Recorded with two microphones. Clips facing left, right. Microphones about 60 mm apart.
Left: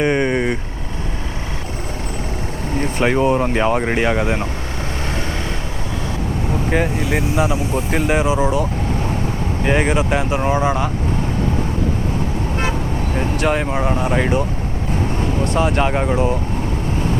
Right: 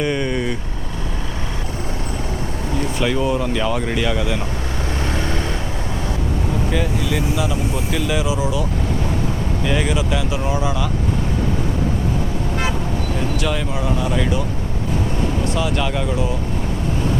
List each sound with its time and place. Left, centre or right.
0.0 s vehicle: left
2.7 s speech: left
6.7 s speech: left
9.6 s speech: left
13.1 s speech: left
15.5 s speech: left